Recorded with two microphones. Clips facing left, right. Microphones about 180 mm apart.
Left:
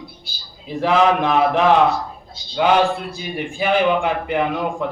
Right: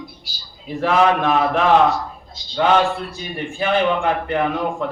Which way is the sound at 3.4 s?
10° left (ahead or behind).